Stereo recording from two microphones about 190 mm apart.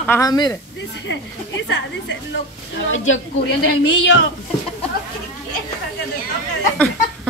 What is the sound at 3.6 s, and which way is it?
Speech, 75° left (ahead or behind).